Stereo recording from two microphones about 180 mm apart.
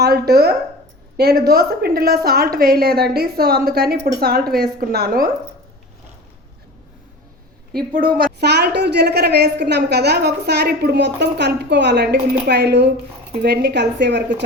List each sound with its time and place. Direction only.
0.0 s a woman's voice: 60° right (ahead or behind)
7.7 s a woman's voice: 55° right (ahead or behind); by 14.4 s 70° right (ahead or behind)